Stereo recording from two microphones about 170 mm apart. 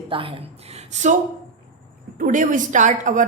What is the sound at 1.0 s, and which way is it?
A woman's voice, 45° right (ahead or behind).